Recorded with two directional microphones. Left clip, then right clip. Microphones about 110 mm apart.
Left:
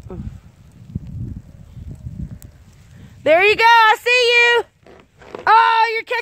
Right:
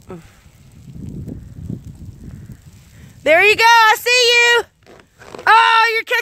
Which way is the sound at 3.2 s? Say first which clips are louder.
Right 1 dB; 20° left (ahead or behind).